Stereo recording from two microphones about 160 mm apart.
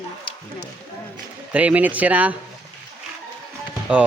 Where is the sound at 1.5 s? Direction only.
10° right (ahead or behind).